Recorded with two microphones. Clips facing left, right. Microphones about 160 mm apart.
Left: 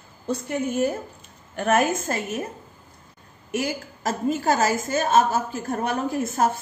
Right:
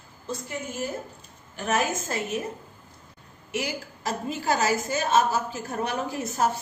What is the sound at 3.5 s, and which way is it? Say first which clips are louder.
A woman's voice: left 4 dB; 50° left (ahead or behind).